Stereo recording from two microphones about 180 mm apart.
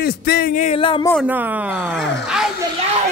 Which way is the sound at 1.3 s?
10° right (ahead or behind).